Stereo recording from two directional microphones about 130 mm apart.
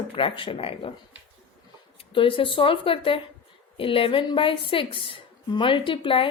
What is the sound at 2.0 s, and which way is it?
A woman's voice, 40° left (ahead or behind).